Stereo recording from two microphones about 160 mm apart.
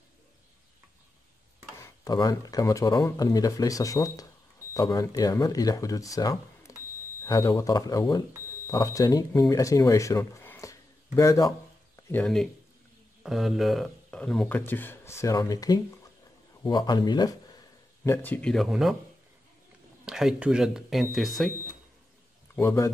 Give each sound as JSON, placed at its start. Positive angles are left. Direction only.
{"t": 1.8, "sound": "speech", "side_deg": 25}
{"t": 12.1, "sound": "speech", "side_deg": 5}
{"t": 18.0, "sound": "speech", "side_deg": 15}
{"t": 20.1, "sound": "speech", "side_deg": -5}
{"t": 22.6, "sound": "speech", "side_deg": 20}